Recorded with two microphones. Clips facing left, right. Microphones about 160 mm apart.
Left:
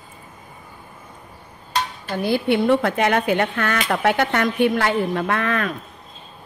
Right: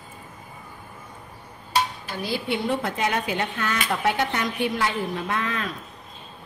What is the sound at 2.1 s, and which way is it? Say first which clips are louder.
Speech: left 8 dB; 55° left (ahead or behind).